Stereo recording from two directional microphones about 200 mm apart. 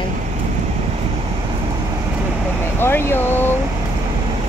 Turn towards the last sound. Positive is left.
turn(degrees=10)  # may be behind; listen again after turning